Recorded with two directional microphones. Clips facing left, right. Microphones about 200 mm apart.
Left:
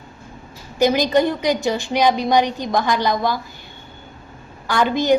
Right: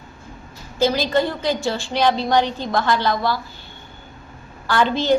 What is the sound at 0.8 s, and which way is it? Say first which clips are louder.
A woman's voice: left 3 dB; 15° left (ahead or behind).